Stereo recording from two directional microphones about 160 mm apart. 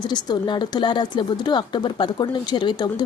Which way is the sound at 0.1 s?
30° left (ahead or behind).